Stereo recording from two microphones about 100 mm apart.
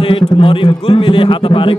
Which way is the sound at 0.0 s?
65° left (ahead or behind).